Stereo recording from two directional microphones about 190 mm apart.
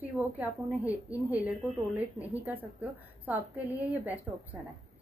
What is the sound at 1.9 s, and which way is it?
A woman's voice, 10° right (ahead or behind).